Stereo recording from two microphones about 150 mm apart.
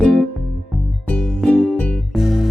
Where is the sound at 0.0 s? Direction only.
Centre (ahead or behind).